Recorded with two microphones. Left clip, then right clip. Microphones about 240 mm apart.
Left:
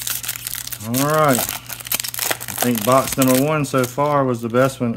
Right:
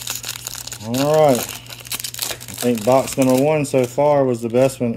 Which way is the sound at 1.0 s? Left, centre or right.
Centre.